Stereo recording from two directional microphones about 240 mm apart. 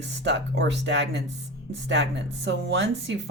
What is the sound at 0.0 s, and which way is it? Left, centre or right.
Speech, right.